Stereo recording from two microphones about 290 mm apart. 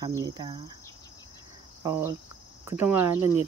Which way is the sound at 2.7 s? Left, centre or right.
Centre.